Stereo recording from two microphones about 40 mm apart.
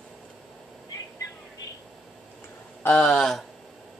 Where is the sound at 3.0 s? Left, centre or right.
Centre.